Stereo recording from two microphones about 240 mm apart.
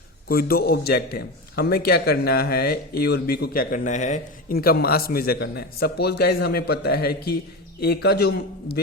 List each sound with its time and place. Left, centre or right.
0.3 s a man's voice: left